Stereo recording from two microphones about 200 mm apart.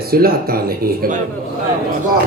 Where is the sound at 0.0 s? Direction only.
50° right (ahead or behind).